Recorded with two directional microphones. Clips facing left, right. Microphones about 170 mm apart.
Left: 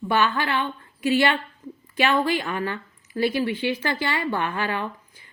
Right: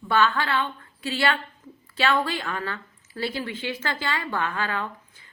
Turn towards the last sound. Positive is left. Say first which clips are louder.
# left 2 dB
turn(degrees=15)  # may be behind; listen again after turning